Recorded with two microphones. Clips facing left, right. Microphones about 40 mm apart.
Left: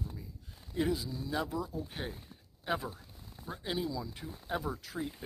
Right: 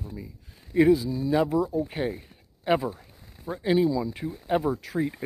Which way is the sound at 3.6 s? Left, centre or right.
Right.